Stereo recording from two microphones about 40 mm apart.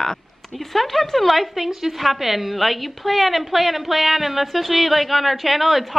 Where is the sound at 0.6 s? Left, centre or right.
Centre.